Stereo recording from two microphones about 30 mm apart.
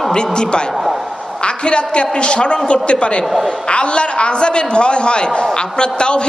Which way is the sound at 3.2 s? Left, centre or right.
Centre.